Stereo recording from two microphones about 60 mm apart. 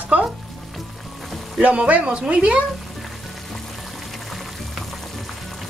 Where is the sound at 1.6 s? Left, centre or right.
Right.